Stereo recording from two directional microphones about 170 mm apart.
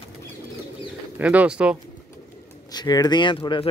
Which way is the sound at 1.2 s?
10° right (ahead or behind).